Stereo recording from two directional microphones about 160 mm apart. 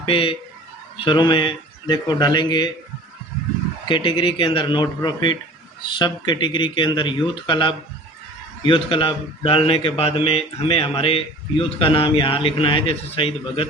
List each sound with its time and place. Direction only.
0.0 s a man's voice: 35° left (ahead or behind)
3.8 s a man's voice: 30° left (ahead or behind)